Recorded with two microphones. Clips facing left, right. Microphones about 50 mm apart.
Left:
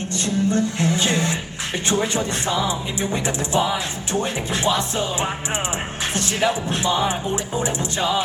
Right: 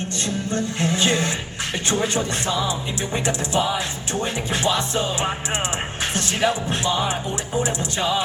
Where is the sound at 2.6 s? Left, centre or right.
Left.